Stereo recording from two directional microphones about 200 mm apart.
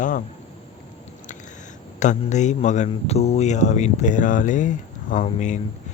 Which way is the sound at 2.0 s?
35° left (ahead or behind).